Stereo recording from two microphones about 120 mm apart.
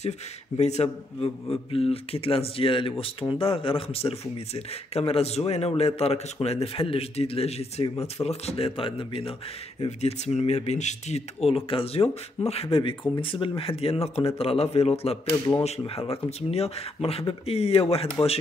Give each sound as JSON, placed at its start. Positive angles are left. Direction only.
{"t": 0.6, "sound": "speech", "side_deg": 65}
{"t": 9.8, "sound": "speech", "side_deg": 65}
{"t": 15.3, "sound": "speech", "side_deg": 30}
{"t": 15.8, "sound": "speech", "side_deg": 50}